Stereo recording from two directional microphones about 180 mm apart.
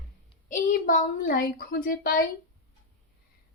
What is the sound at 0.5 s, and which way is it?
A woman's voice, 50° left (ahead or behind).